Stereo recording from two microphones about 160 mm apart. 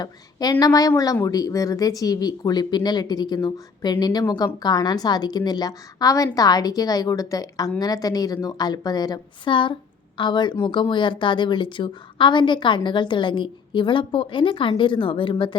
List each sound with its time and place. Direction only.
0.0 s a woman's voice: 25° left (ahead or behind)